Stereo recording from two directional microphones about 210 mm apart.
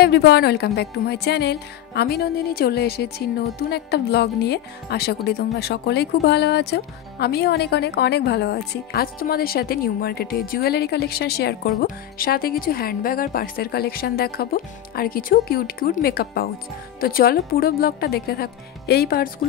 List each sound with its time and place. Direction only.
0.0 s speech: 50° left (ahead or behind)